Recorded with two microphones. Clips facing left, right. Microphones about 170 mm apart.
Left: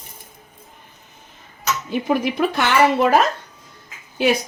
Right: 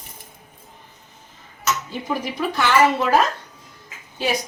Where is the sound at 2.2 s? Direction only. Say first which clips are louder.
Left 3 dB; 65° left (ahead or behind).